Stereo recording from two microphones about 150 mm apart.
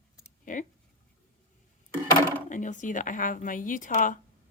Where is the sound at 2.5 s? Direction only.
55° left (ahead or behind).